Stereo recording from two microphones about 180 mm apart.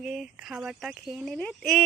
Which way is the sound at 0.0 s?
Centre (ahead or behind).